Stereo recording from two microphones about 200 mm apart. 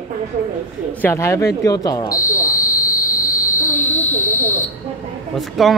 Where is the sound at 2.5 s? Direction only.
40° left (ahead or behind).